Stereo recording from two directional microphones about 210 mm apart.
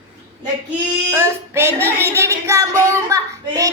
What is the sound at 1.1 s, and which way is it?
A child's voice, 10° right (ahead or behind).